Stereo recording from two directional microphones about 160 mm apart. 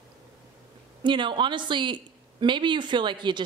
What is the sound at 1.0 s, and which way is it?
Speech, 30° right (ahead or behind).